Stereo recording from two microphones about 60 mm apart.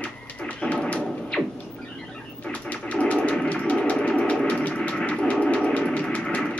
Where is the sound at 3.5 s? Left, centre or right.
Centre.